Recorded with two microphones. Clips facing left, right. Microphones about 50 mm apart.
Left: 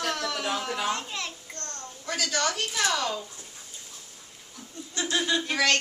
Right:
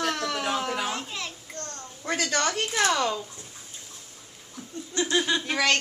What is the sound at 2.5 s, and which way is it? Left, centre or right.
Speech, right.